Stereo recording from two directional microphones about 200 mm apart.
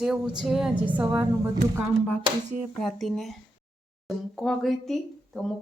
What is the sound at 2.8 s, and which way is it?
Speech, centre (ahead or behind).